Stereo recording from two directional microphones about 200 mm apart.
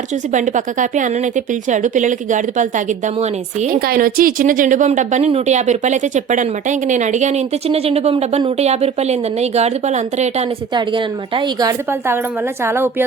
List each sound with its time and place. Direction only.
0.3 s a woman's voice: 40° right (ahead or behind)
10.8 s a woman's voice: 25° right (ahead or behind)
11.9 s a woman's voice: 10° right (ahead or behind)